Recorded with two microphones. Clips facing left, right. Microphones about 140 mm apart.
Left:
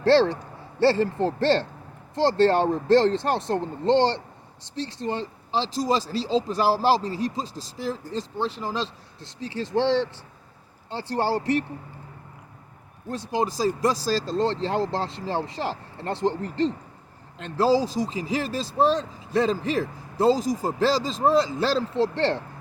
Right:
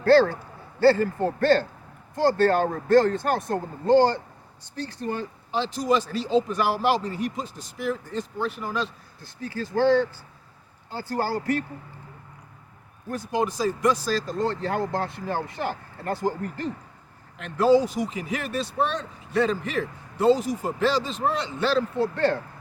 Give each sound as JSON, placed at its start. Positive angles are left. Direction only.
{"t": 0.0, "sound": "a man's voice", "side_deg": 25}
{"t": 13.1, "sound": "a man's voice", "side_deg": 30}